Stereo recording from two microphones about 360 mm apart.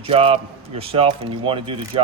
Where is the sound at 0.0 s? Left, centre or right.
Centre.